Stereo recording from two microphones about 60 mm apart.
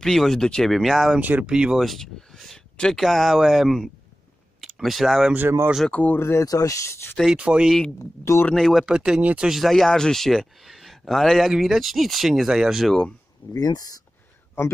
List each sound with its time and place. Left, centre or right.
0.0 s a man's voice: centre
1.2 s speech: right
1.5 s speech: centre
1.8 s a man's voice: centre
5.9 s speech: left
6.1 s speech: left
6.4 s speech: left
7.3 s speech: right
8.0 s speech: left
8.5 s a man's voice: centre
8.8 s a man's voice: centre
13.5 s speech: left
14.6 s speech: left